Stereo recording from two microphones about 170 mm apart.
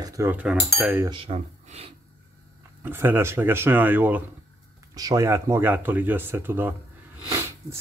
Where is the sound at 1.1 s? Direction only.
35° right (ahead or behind).